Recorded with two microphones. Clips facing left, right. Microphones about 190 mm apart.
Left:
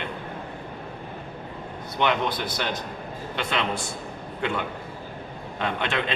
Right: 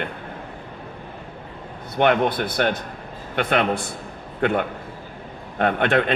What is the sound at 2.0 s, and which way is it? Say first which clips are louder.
Speech: right 6 dB; 55° right (ahead or behind).